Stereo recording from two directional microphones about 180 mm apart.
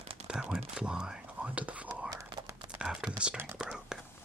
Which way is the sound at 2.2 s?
20° right (ahead or behind).